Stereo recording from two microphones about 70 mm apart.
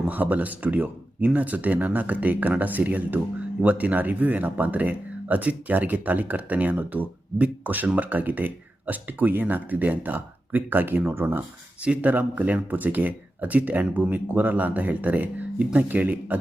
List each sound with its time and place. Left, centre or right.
0.1 s speech: right
11.8 s speech: right